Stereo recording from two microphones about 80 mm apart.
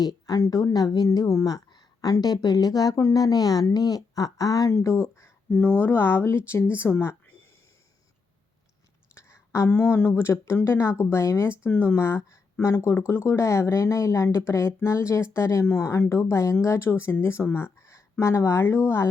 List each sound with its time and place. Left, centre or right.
0.0 s speech: left
5.6 s speech: left
9.1 s a sound: left
9.7 s speech: left